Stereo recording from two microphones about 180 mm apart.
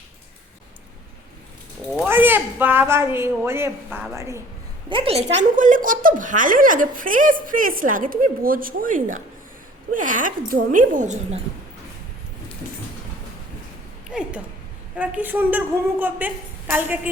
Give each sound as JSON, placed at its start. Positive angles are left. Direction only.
{"t": 2.0, "sound": "a woman's voice", "side_deg": -10}
{"t": 4.9, "sound": "a woman's voice", "side_deg": -30}
{"t": 14.1, "sound": "a woman's voice", "side_deg": -5}